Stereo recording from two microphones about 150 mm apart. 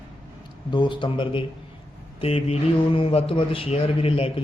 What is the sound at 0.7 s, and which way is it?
A man's voice, 30° left (ahead or behind).